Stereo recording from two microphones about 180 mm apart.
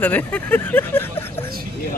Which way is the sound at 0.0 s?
10° left (ahead or behind).